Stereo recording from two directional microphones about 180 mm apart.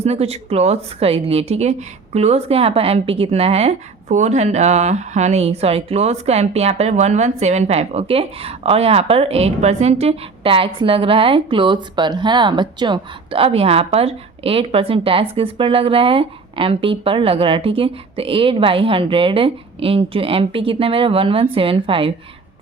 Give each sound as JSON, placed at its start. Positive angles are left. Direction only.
{"t": 0.0, "sound": "a woman's voice", "side_deg": -35}